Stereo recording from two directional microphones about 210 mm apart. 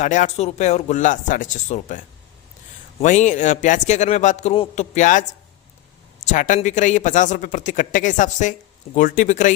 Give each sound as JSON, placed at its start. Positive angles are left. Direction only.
{"t": 0.0, "sound": "a man's voice", "side_deg": 35}
{"t": 3.0, "sound": "a man's voice", "side_deg": 35}
{"t": 6.3, "sound": "a man's voice", "side_deg": 35}